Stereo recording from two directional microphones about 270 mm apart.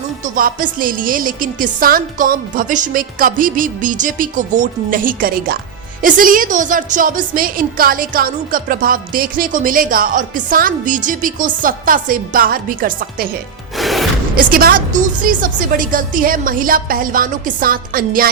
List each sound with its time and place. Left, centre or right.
0.3 s a woman's voice: right
13.7 s music: centre
14.3 s a woman's voice: right